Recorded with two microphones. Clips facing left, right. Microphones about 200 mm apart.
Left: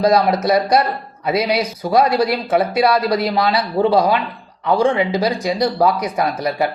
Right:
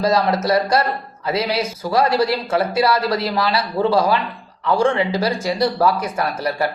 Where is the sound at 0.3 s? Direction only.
15° left (ahead or behind).